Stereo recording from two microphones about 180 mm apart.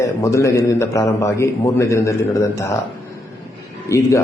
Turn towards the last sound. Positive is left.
turn(degrees=15)  # may be behind; listen again after turning